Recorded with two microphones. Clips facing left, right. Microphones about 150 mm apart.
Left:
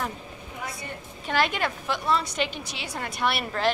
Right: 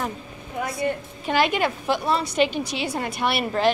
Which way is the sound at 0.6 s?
65° right (ahead or behind).